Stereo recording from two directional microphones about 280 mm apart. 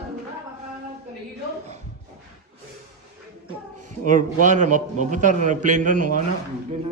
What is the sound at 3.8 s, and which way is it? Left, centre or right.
A man's voice, right.